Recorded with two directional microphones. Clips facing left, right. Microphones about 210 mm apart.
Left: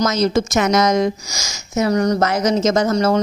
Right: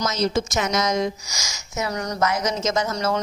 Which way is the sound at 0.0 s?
70° left (ahead or behind).